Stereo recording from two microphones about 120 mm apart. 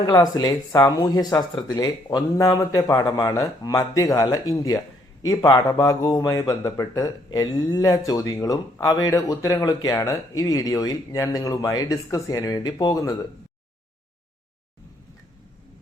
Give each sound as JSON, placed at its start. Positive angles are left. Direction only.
{"t": 0.0, "sound": "speech", "side_deg": 35}